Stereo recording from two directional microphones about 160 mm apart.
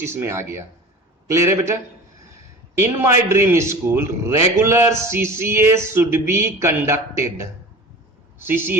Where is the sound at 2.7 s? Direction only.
15° right (ahead or behind).